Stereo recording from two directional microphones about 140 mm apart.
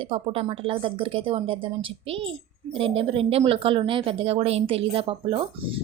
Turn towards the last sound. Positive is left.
turn(degrees=-40)  # may be behind; listen again after turning